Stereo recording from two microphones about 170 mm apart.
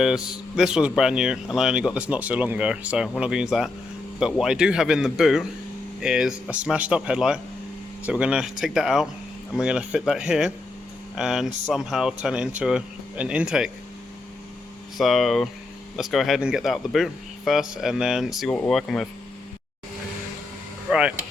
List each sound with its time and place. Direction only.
0.0 s speech: 5° right (ahead or behind)
14.9 s speech: centre (ahead or behind)
20.9 s speech: 5° right (ahead or behind)